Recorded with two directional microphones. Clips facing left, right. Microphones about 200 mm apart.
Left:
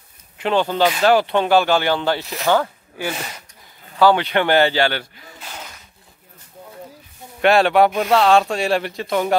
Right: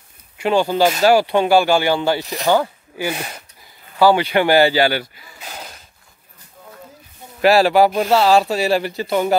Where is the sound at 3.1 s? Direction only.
55° right (ahead or behind).